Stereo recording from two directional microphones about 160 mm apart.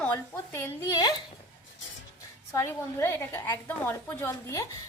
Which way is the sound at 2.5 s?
15° left (ahead or behind).